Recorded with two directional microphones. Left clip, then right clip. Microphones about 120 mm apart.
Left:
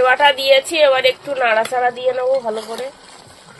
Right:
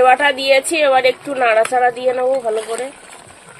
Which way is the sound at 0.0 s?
75° right (ahead or behind).